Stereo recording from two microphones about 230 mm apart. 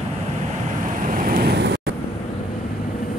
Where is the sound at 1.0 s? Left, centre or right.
Right.